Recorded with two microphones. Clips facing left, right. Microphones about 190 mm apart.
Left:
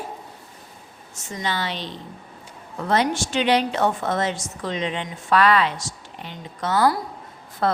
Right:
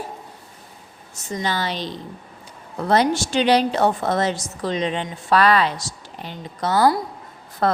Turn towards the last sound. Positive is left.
turn(degrees=-50)  # may be behind; listen again after turning